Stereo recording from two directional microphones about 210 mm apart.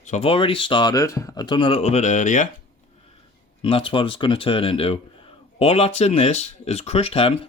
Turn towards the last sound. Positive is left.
turn(degrees=25)  # may be behind; listen again after turning